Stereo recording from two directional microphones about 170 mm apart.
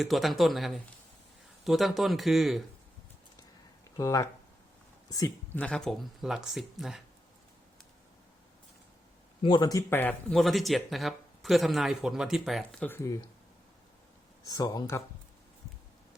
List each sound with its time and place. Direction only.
0.0 s speech: centre (ahead or behind)
3.9 s speech: 20° left (ahead or behind)
5.5 s speech: 5° left (ahead or behind)
9.4 s speech: 30° left (ahead or behind)
14.4 s speech: 20° left (ahead or behind)